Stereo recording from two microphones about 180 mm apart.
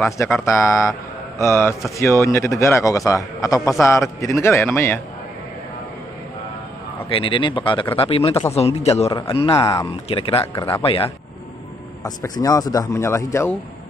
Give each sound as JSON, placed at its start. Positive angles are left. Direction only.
{"t": 0.5, "sound": "a man's voice", "side_deg": 15}
{"t": 7.1, "sound": "a man's voice", "side_deg": 30}
{"t": 9.5, "sound": "a man's voice", "side_deg": 20}
{"t": 10.0, "sound": "a man's voice", "side_deg": 30}
{"t": 12.0, "sound": "a man's voice", "side_deg": 20}